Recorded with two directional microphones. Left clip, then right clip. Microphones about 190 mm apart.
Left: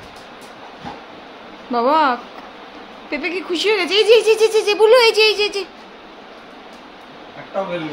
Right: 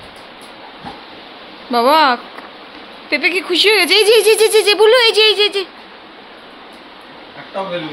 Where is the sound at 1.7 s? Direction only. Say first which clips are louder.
Right 4 dB; 5° right (ahead or behind).